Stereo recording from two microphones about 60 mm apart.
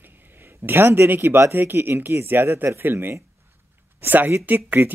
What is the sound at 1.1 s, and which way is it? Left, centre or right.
Speech, right.